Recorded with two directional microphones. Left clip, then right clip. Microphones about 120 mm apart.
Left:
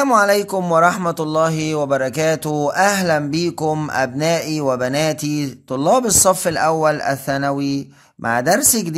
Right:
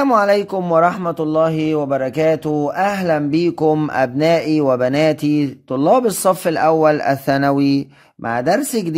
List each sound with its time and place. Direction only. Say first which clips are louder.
0.0 s a man's voice: even; 25° right (ahead or behind)
8.3 s speech: left 1 dB; 20° right (ahead or behind)